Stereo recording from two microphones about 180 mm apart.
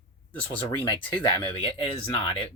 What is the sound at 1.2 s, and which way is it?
Speech, 30° left (ahead or behind).